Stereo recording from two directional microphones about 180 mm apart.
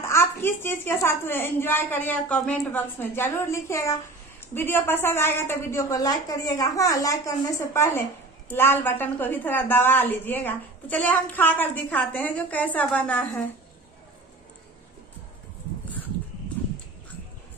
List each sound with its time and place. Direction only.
0.0 s a woman's voice: 15° left (ahead or behind)
16.6 s horse: 10° left (ahead or behind)